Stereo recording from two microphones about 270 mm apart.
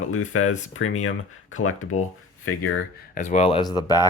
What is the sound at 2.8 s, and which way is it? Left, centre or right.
Speech, left.